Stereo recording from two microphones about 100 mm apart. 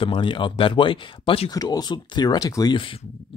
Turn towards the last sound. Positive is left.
turn(degrees=60)  # may be behind; listen again after turning